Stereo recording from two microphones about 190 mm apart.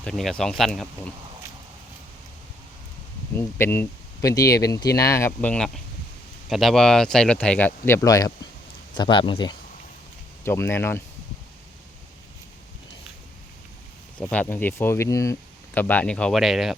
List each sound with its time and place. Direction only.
0.0 s speech: 5° left (ahead or behind)
3.3 s speech: 10° left (ahead or behind)
10.4 s speech: 15° left (ahead or behind)
14.2 s speech: 5° left (ahead or behind)